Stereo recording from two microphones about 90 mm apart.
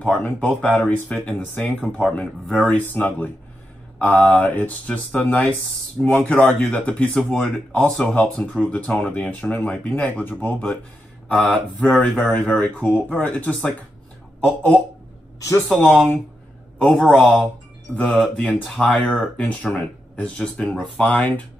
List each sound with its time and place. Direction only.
0.0 s speech: 15° left (ahead or behind)